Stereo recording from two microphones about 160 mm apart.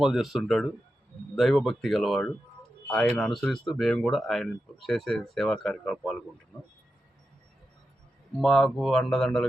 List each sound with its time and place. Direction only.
0.0 s speech: centre (ahead or behind)
8.4 s speech: centre (ahead or behind)